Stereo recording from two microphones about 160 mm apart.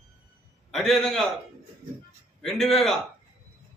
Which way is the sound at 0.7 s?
Centre (ahead or behind).